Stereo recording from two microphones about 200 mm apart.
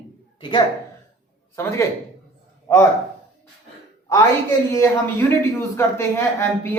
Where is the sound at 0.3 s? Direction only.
25° left (ahead or behind).